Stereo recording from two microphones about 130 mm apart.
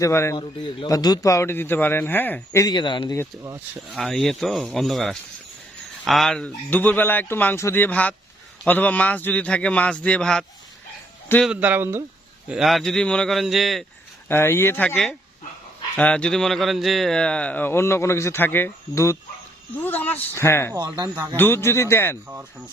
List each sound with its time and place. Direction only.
0.0 s speech: 20° left (ahead or behind)
0.3 s speech: 35° left (ahead or behind)
3.9 s a man's voice: centre (ahead or behind)
11.4 s speech: 10° right (ahead or behind)
12.5 s a man's voice: centre (ahead or behind)
14.3 s speech: 20° left (ahead or behind)
20.7 s speech: 35° right (ahead or behind)
21.3 s speech: 15° left (ahead or behind)